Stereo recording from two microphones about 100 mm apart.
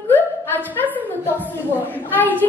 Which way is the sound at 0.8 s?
15° left (ahead or behind).